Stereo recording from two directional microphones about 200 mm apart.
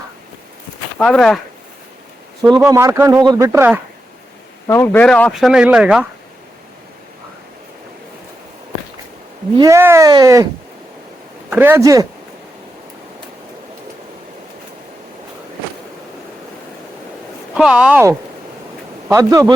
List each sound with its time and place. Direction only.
0.9 s speech: 5° left (ahead or behind)
2.5 s speech: 15° right (ahead or behind)
4.7 s speech: 10° left (ahead or behind)
9.6 s speech: 15° right (ahead or behind)
11.5 s speech: 10° right (ahead or behind)
17.5 s speech: 5° right (ahead or behind)